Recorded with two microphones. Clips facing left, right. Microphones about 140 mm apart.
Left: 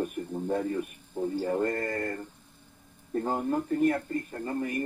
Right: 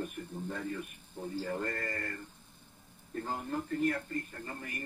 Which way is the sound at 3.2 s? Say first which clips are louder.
Left 7 dB; 55° left (ahead or behind).